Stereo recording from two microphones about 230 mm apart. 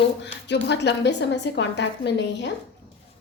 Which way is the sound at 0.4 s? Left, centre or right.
Left.